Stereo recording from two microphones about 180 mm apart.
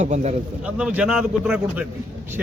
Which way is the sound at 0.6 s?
5° right (ahead or behind).